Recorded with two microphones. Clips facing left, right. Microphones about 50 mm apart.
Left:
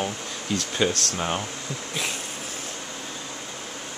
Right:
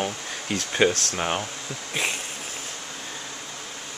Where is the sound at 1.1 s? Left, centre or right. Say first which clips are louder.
Right 1 dB; centre.